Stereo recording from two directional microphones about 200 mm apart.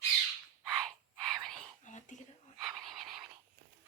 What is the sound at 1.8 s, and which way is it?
Whispering, 35° left (ahead or behind).